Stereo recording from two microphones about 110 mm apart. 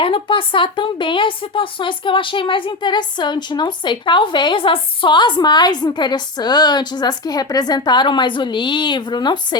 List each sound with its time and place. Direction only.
0.0 s a woman's voice: 55° left (ahead or behind)